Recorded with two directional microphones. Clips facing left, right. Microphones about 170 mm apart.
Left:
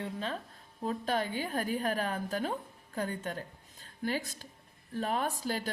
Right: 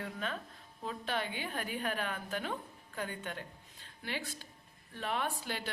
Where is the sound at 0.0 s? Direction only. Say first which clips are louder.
Left 3 dB; 30° left (ahead or behind).